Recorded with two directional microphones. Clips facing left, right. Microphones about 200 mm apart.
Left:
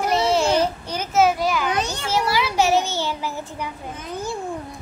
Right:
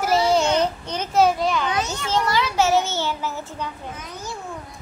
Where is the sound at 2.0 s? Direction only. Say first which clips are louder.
Even; 10° left (ahead or behind).